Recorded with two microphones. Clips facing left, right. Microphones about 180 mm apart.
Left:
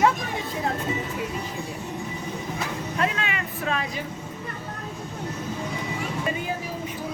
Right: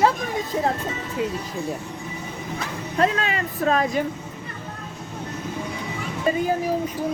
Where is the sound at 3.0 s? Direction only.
40° right (ahead or behind).